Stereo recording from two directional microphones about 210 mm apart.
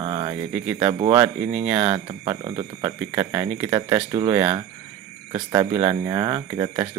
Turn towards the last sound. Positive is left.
turn(degrees=-20)  # may be behind; listen again after turning